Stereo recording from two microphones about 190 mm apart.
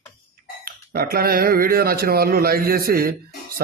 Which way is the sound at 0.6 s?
50° right (ahead or behind).